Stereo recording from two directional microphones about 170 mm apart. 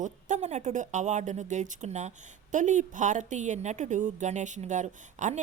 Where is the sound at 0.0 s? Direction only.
45° right (ahead or behind).